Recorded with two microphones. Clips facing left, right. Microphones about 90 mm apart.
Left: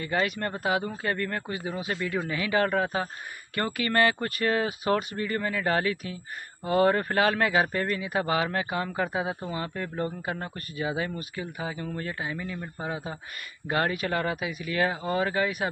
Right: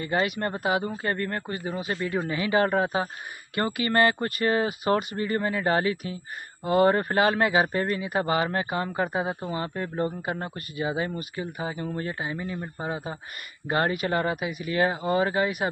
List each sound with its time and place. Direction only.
0.0 s speech: 5° right (ahead or behind)
2.0 s speech: 20° right (ahead or behind)
2.3 s speech: 5° right (ahead or behind)
12.4 s speech: 20° right (ahead or behind)
12.7 s speech: 5° right (ahead or behind)